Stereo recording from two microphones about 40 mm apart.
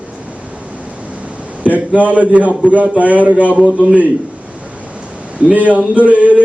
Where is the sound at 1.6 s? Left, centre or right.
Right.